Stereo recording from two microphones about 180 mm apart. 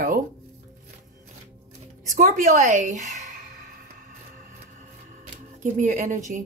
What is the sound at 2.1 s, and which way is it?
Speech, 45° right (ahead or behind).